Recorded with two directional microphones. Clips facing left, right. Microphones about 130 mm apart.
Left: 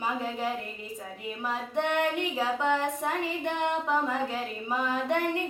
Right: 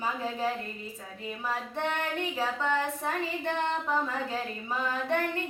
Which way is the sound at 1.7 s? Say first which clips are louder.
Left 8 dB; 15° left (ahead or behind).